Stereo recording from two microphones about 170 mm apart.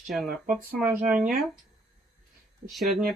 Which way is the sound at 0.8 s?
5° right (ahead or behind).